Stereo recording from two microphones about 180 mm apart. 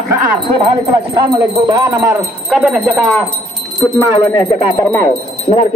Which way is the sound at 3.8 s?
15° left (ahead or behind).